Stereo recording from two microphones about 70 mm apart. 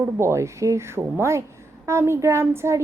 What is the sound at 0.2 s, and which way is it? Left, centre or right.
Speech, right.